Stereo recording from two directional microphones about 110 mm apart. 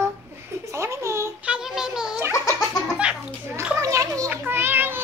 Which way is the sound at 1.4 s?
5° right (ahead or behind).